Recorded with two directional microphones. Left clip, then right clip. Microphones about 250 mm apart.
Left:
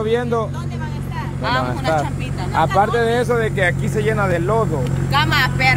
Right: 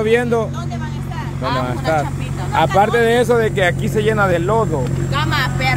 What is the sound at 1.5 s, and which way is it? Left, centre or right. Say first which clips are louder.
Speech: even; centre.